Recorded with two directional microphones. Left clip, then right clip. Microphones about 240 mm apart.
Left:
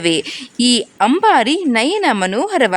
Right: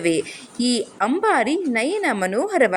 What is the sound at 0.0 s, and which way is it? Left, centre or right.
Speech, left.